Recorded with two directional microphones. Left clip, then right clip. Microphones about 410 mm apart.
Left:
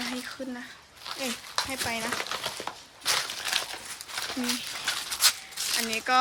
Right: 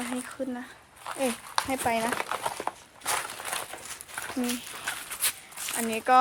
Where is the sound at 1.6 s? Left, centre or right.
Centre.